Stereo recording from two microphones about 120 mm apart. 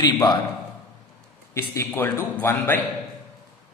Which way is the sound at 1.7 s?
20° left (ahead or behind).